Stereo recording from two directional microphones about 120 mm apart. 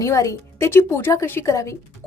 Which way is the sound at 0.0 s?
25° left (ahead or behind).